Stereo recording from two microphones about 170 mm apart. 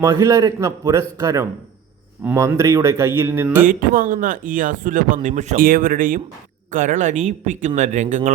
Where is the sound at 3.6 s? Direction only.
50° right (ahead or behind).